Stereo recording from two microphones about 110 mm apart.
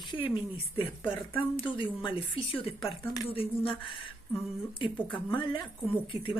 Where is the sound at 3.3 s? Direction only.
55° left (ahead or behind).